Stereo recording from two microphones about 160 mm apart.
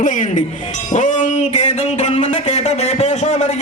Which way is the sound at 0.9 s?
50° left (ahead or behind).